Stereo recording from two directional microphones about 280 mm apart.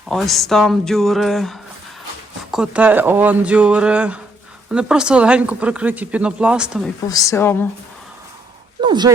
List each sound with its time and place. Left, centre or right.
0.1 s speech: centre
7.1 s speech: centre
8.8 s speech: centre